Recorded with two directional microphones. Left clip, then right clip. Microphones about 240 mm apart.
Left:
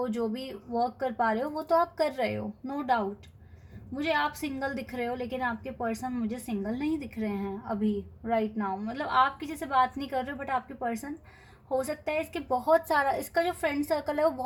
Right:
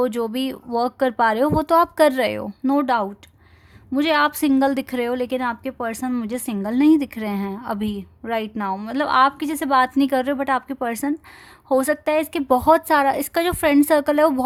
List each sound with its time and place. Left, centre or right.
0.1 s a woman's voice: right